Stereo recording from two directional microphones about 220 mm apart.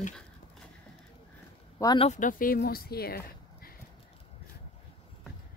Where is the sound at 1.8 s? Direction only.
20° left (ahead or behind).